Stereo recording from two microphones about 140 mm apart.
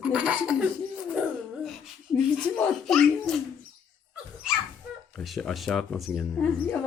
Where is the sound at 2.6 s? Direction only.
Centre (ahead or behind).